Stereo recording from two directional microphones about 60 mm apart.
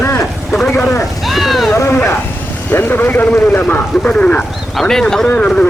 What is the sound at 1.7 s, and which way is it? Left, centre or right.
Sheep, left.